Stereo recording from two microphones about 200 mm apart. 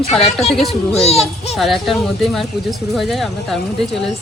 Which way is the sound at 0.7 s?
30° left (ahead or behind).